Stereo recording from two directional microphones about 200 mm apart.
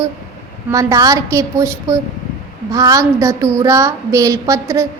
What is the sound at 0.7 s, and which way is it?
Speech, 15° right (ahead or behind).